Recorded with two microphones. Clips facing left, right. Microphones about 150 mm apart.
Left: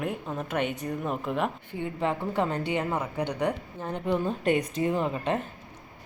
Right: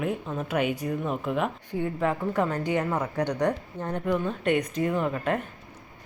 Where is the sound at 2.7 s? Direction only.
10° left (ahead or behind).